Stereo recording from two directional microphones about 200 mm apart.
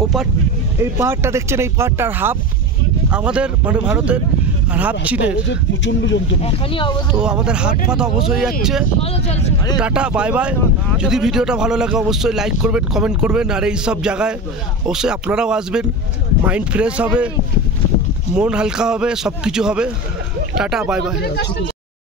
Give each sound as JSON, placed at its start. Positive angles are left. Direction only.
{"t": 0.7, "sound": "a man's voice", "side_deg": -10}
{"t": 6.4, "sound": "speech", "side_deg": 25}
{"t": 7.2, "sound": "a man's voice", "side_deg": -5}
{"t": 9.0, "sound": "speech", "side_deg": 30}
{"t": 9.8, "sound": "a man's voice", "side_deg": -5}
{"t": 18.3, "sound": "a man's voice", "side_deg": -5}
{"t": 21.2, "sound": "speech", "side_deg": 60}